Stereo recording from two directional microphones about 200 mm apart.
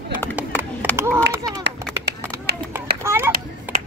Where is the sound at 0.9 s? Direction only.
10° right (ahead or behind).